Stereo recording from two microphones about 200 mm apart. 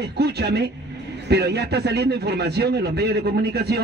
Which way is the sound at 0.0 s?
55° right (ahead or behind).